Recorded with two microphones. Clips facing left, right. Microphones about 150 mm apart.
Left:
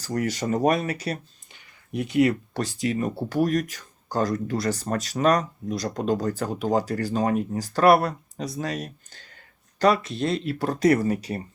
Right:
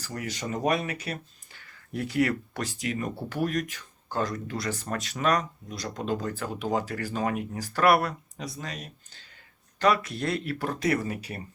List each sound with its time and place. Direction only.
0.0 s speech: 45° left (ahead or behind)
1.5 s speech: 20° left (ahead or behind)
8.5 s speech: 40° left (ahead or behind)
9.7 s speech: 30° left (ahead or behind)